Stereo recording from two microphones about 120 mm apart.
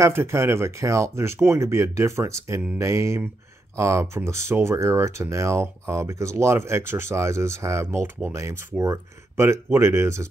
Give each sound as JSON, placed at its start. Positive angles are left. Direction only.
{"t": 0.0, "sound": "speech", "side_deg": -20}